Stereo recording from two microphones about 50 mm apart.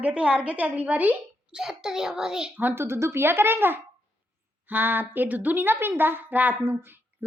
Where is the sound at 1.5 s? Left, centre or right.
Centre.